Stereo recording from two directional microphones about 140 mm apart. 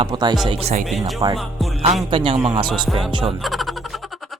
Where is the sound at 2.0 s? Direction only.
35° right (ahead or behind).